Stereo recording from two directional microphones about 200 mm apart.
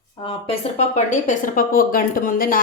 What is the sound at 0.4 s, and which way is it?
A woman's voice, 30° left (ahead or behind).